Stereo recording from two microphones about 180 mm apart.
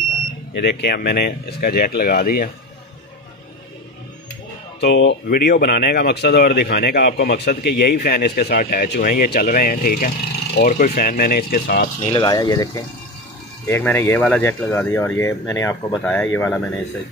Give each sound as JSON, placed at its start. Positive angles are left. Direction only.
{"t": 0.7, "sound": "speech", "side_deg": 70}
{"t": 4.7, "sound": "speech", "side_deg": 75}
{"t": 12.0, "sound": "speech", "side_deg": 30}